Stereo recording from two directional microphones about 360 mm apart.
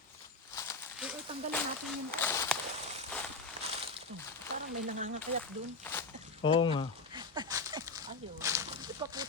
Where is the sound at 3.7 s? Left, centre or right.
Centre.